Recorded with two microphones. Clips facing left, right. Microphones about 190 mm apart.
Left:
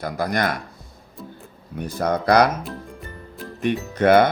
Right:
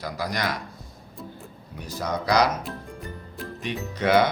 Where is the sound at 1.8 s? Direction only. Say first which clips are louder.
Left 6 dB; 55° left (ahead or behind).